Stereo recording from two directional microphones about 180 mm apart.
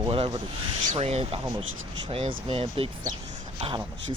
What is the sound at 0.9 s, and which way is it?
Speech, 35° right (ahead or behind).